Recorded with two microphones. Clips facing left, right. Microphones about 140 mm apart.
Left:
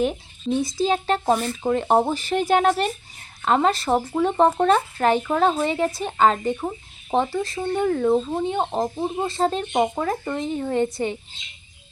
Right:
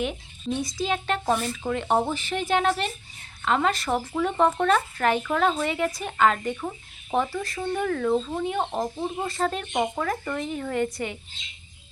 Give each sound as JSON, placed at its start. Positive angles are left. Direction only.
{"t": 0.6, "sound": "speech", "side_deg": 30}